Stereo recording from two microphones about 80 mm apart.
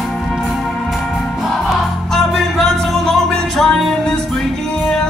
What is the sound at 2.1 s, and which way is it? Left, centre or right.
Music, centre.